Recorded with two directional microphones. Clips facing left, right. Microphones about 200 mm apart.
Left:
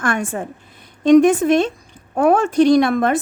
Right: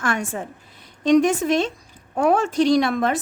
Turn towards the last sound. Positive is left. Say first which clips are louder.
# left 4 dB
turn(degrees=55)  # may be behind; listen again after turning